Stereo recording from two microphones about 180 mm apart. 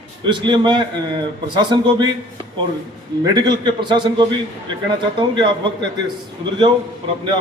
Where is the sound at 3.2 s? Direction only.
25° right (ahead or behind).